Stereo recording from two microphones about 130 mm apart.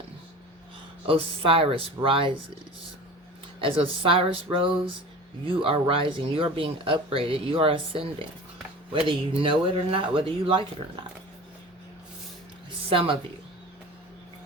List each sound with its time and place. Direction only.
1.0 s speech: 45° right (ahead or behind)
3.6 s speech: 45° right (ahead or behind)
12.9 s speech: 45° right (ahead or behind)